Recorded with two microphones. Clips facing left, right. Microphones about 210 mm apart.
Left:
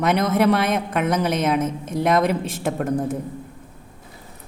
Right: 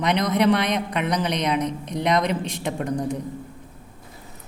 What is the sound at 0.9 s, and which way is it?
Speech, 50° left (ahead or behind).